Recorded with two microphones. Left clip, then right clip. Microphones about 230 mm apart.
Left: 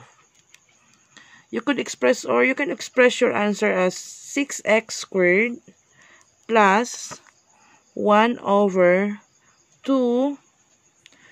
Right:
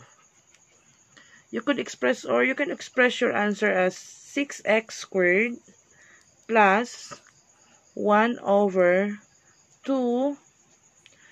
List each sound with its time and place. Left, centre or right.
1.1 s speech: left